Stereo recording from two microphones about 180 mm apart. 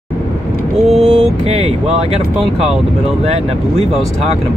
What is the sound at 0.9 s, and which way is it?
Vehicle, 5° right (ahead or behind).